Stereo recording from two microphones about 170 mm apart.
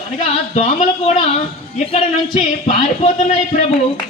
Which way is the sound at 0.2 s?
40° left (ahead or behind).